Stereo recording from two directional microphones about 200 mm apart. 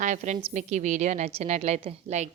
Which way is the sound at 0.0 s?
35° right (ahead or behind).